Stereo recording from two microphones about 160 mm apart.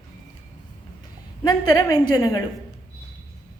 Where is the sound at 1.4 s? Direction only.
25° left (ahead or behind).